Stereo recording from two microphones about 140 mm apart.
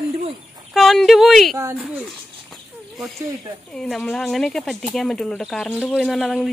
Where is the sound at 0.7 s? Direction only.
Centre (ahead or behind).